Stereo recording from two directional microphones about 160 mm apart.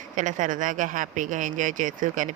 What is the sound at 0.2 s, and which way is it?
Speech, 50° right (ahead or behind).